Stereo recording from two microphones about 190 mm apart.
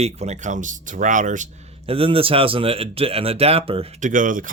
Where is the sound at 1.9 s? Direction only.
30° right (ahead or behind).